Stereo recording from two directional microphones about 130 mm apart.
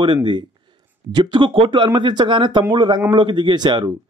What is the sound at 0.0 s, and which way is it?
A man's voice, 40° right (ahead or behind).